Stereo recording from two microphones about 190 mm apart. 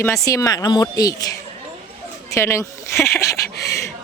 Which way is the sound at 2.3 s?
15° left (ahead or behind).